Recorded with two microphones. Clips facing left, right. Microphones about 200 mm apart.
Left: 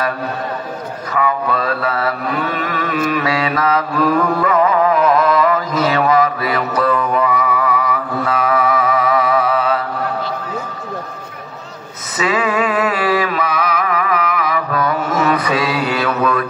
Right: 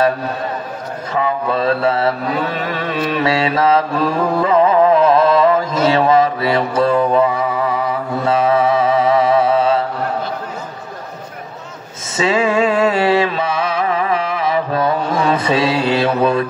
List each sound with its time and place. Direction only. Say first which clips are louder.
1.1 s mantra: even; 25° right (ahead or behind)
12.2 s music: right 2 dB; 25° right (ahead or behind)
15.2 s mantra: right 3 dB; 25° right (ahead or behind)